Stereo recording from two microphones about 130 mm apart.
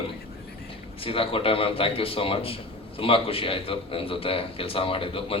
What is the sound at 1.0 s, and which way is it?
A man's voice, 45° left (ahead or behind).